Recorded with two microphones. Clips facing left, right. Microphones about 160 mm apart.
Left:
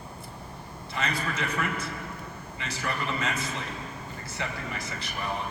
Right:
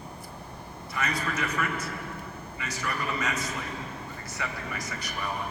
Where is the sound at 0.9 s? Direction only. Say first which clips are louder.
Even; 30° left (ahead or behind).